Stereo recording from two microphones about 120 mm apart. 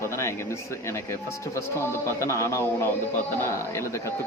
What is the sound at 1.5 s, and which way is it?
Speech, 25° left (ahead or behind).